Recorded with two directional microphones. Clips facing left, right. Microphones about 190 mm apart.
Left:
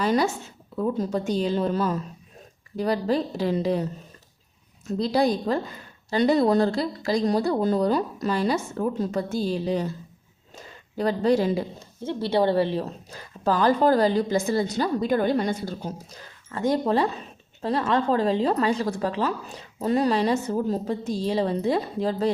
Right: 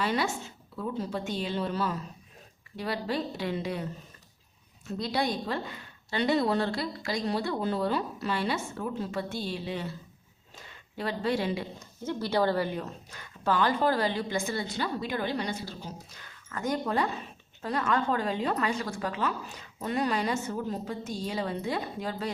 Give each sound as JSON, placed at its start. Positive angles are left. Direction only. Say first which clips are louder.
{"t": 0.0, "sound": "a woman's voice", "louder": "left 6 dB", "side_deg": 40}
{"t": 4.9, "sound": "a woman's voice", "louder": "left 8 dB", "side_deg": 35}
{"t": 10.9, "sound": "a woman's voice", "louder": "left 8 dB", "side_deg": 40}
{"t": 12.0, "sound": "a woman's voice", "louder": "left 5 dB", "side_deg": 25}
{"t": 16.2, "sound": "a woman's voice", "louder": "left 8 dB", "side_deg": 30}